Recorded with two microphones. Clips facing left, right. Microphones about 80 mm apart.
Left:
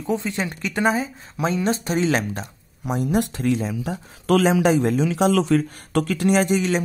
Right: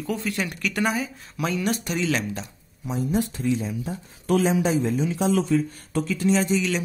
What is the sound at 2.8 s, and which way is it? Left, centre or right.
Speech, left.